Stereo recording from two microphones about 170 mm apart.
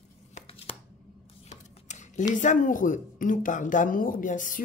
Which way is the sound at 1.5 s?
45° left (ahead or behind).